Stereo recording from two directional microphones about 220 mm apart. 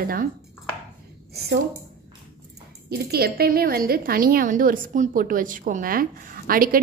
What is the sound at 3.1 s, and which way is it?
A woman's voice, 45° right (ahead or behind).